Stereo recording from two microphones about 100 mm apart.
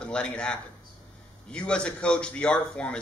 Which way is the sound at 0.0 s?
10° left (ahead or behind).